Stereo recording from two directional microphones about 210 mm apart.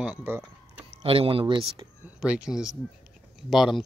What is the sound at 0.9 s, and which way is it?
Speech, 25° right (ahead or behind).